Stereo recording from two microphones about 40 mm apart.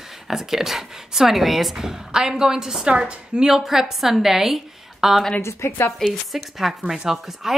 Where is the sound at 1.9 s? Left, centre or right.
Centre.